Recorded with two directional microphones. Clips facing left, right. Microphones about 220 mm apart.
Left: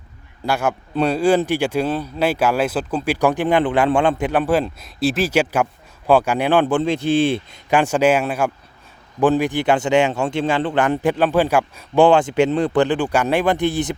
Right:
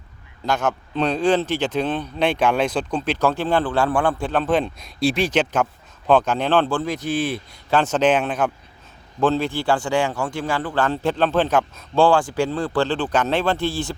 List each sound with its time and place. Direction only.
0.4 s speech: 10° left (ahead or behind); by 7.6 s 25° left (ahead or behind)
7.7 s speech: 10° left (ahead or behind)